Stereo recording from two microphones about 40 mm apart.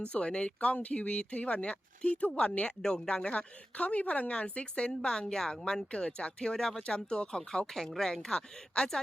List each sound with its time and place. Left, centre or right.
0.1 s speech: left
3.3 s speech: left
6.6 s speech: centre
6.8 s speech: left
7.9 s speech: centre